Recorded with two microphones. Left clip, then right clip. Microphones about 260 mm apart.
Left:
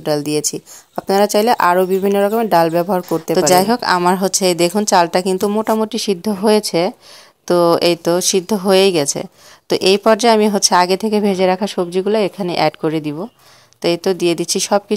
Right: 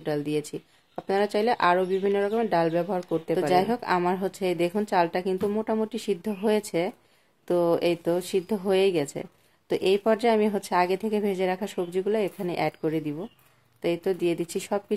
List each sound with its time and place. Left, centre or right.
0.0 s speech: left
14.4 s speech: centre